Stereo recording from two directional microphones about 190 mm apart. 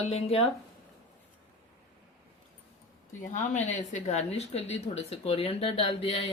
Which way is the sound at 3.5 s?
40° left (ahead or behind).